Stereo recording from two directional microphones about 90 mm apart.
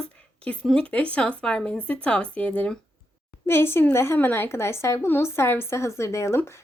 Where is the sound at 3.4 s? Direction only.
25° left (ahead or behind).